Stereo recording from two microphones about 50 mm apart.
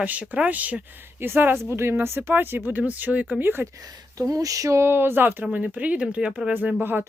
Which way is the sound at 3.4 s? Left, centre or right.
Right.